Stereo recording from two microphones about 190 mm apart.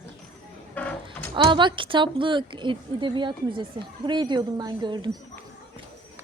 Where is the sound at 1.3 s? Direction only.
25° right (ahead or behind).